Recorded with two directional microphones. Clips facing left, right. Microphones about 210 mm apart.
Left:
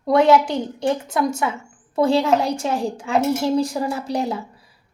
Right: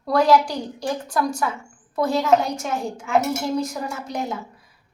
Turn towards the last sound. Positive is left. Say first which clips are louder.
# left 5 dB
turn(degrees=35)  # may be behind; listen again after turning